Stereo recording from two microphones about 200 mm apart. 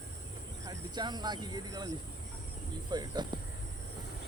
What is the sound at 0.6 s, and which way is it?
Speech, 20° right (ahead or behind).